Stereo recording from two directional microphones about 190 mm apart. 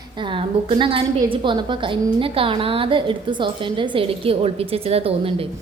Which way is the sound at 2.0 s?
25° right (ahead or behind).